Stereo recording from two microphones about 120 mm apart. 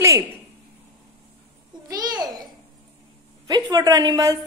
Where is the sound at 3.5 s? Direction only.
30° right (ahead or behind).